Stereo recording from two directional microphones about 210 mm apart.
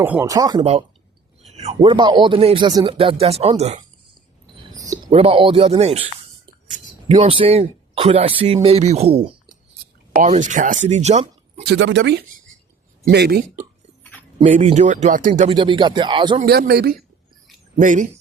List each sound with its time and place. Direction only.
0.0 s speech: 10° right (ahead or behind); by 3.8 s 30° right (ahead or behind)
4.8 s a sound: 15° right (ahead or behind)
5.1 s speech: 25° right (ahead or behind)
11.7 s a man's voice: 60° right (ahead or behind)
14.0 s a sound: 10° left (ahead or behind)
14.4 s speech: 35° right (ahead or behind)
15.4 s speech: 25° right (ahead or behind)
16.4 s a man's voice: 50° right (ahead or behind)
17.7 s speech: 35° right (ahead or behind)